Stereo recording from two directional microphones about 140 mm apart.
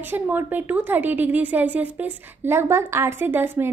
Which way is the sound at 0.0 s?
15° right (ahead or behind).